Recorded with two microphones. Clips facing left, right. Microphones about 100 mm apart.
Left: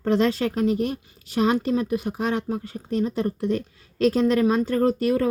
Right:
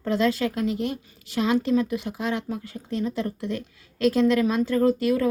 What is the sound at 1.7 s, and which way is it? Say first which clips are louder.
Speech: even; 35° left (ahead or behind).